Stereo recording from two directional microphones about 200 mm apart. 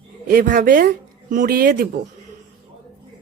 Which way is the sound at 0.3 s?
40° right (ahead or behind).